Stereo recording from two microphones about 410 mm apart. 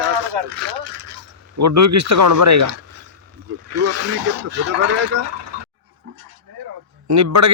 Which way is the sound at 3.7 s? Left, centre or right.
Right.